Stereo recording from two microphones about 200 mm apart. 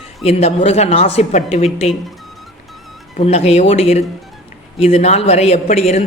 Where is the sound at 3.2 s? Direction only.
30° left (ahead or behind).